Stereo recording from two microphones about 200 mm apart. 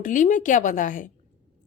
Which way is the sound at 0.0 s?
40° left (ahead or behind).